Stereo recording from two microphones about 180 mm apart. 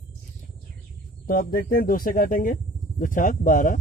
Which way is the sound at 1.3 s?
50° left (ahead or behind).